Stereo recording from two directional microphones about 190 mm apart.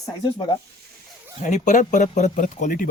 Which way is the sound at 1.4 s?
40° left (ahead or behind).